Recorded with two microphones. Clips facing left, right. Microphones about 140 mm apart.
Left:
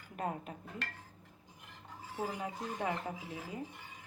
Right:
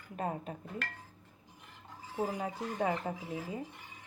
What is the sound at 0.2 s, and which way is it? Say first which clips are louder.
Speech: right 2 dB; 30° right (ahead or behind).